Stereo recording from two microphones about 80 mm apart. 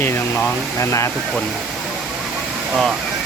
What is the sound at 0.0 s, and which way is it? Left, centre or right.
Speech, left.